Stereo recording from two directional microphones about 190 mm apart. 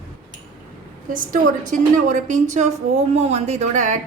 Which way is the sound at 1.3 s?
40° right (ahead or behind).